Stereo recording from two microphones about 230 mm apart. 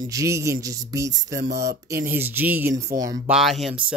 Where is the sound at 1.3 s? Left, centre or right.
Right.